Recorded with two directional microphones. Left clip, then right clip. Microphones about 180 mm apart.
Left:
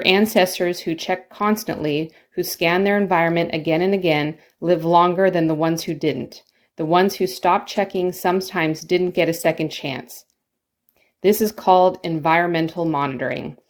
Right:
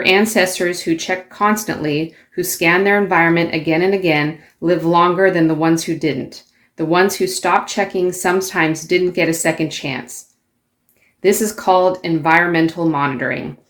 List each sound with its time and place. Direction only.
0.0 s speech: 40° left (ahead or behind)
11.2 s speech: 40° left (ahead or behind)